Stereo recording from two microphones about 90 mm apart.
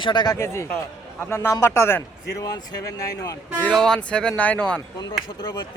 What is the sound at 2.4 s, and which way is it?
Speech, 45° left (ahead or behind).